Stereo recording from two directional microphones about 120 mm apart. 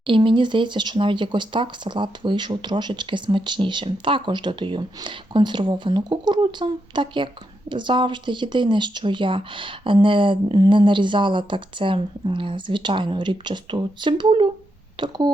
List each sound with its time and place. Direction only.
0.1 s speech: 45° right (ahead or behind)